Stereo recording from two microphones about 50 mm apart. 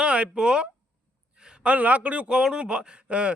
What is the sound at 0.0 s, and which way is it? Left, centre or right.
Speech, right.